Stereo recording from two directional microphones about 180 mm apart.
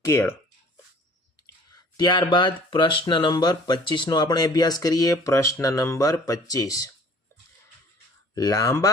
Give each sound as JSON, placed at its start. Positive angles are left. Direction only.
{"t": 0.0, "sound": "speech", "side_deg": 15}
{"t": 1.7, "sound": "speech", "side_deg": 25}
{"t": 8.4, "sound": "speech", "side_deg": 20}